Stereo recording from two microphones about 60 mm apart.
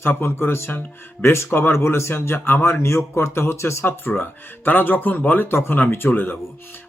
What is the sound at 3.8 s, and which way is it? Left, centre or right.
A man's voice, left.